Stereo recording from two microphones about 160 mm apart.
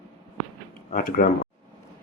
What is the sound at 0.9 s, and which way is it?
Speech, 65° left (ahead or behind).